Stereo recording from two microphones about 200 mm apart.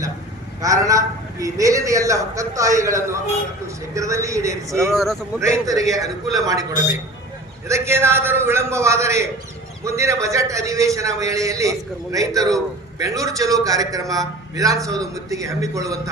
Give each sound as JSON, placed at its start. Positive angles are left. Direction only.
{"t": 0.6, "sound": "a man's voice", "side_deg": -15}
{"t": 4.9, "sound": "speech", "side_deg": 0}
{"t": 5.4, "sound": "a man's voice", "side_deg": -15}